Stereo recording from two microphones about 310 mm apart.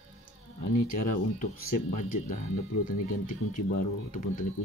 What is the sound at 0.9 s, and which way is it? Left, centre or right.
Speech, left.